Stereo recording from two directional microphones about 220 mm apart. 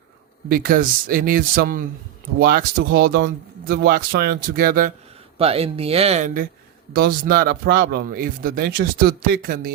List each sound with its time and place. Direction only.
0.4 s speech: 40° right (ahead or behind)
5.4 s speech: 25° right (ahead or behind)